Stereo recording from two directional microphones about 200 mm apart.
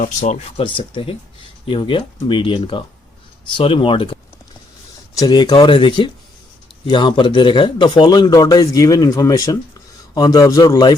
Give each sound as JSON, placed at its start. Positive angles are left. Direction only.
{"t": 0.0, "sound": "a man's voice", "side_deg": 35}
{"t": 5.2, "sound": "a man's voice", "side_deg": 20}